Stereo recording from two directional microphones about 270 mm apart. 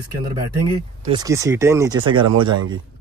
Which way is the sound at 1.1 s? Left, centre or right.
Centre.